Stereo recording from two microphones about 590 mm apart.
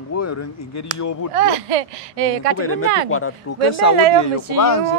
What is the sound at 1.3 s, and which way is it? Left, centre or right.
Speech, right.